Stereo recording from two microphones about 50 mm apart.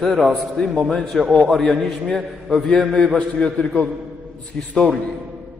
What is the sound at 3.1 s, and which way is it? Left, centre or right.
Speech, left.